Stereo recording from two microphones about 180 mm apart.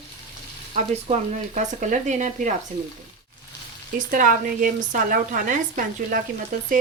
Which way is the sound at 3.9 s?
50° right (ahead or behind).